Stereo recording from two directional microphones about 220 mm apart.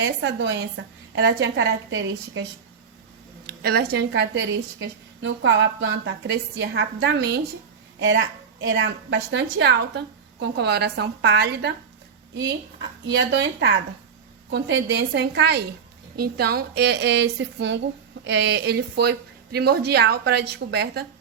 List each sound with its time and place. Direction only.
0.2 s a woman's voice: 55° right (ahead or behind)
3.4 s a woman's voice: 45° right (ahead or behind)
8.7 s speech: 60° right (ahead or behind)
13.1 s speech: 50° right (ahead or behind)